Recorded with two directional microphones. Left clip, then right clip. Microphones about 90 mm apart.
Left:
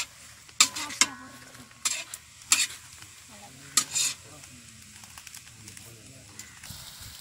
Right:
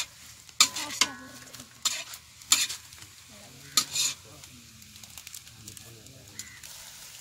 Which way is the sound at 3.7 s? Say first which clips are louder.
Right 1 dB; centre (ahead or behind).